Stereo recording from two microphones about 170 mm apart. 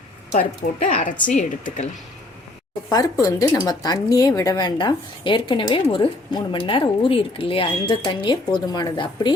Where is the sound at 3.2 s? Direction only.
20° left (ahead or behind).